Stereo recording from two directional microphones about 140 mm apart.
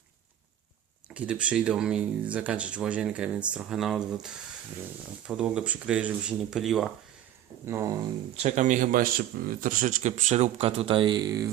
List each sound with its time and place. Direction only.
1.1 s speech: 10° right (ahead or behind)
5.3 s speech: 5° right (ahead or behind)
7.6 s speech: 20° right (ahead or behind)
8.4 s speech: 55° right (ahead or behind); by 11.5 s 25° right (ahead or behind)